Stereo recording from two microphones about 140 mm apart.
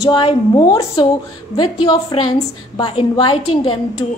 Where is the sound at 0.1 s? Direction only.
30° left (ahead or behind).